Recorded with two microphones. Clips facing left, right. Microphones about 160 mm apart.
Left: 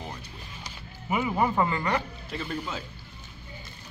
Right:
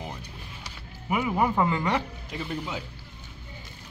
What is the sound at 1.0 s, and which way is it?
Speech, 5° right (ahead or behind).